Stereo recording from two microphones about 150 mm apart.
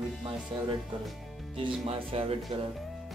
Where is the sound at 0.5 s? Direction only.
30° right (ahead or behind).